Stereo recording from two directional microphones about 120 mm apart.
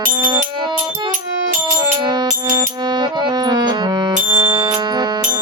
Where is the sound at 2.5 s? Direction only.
35° right (ahead or behind).